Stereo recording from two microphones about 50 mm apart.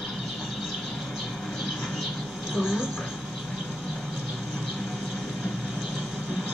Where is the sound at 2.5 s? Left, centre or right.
Centre.